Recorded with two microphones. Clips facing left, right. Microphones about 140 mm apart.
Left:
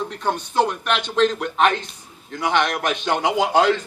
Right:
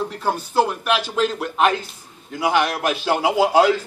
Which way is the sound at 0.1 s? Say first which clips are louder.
Right 1 dB; 5° right (ahead or behind).